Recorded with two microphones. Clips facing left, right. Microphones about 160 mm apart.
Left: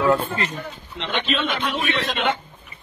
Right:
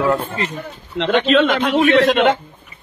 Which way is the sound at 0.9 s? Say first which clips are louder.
Right 11 dB; 90° right.